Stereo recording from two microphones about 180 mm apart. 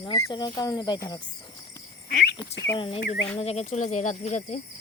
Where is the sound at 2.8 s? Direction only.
30° left (ahead or behind).